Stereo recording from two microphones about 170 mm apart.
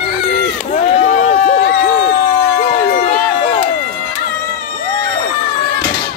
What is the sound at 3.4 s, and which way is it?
Run, 35° left (ahead or behind).